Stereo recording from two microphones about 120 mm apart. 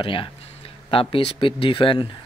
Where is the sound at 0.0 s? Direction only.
45° left (ahead or behind).